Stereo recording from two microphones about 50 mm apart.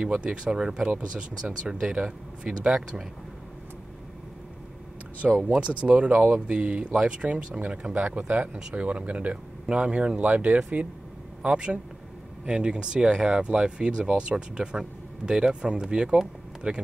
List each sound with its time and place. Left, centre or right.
0.0 s speech: centre
5.4 s speech: right